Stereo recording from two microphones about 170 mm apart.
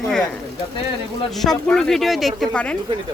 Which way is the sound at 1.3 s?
Centre (ahead or behind).